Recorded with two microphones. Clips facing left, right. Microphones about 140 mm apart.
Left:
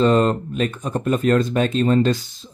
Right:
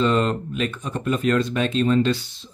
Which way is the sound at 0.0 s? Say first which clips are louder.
Left 4 dB; 40° left (ahead or behind).